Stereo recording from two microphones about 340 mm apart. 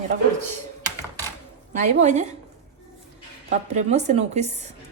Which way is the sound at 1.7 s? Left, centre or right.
Right.